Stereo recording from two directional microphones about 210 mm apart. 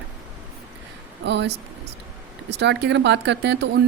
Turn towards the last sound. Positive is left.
turn(degrees=-55)  # may be behind; listen again after turning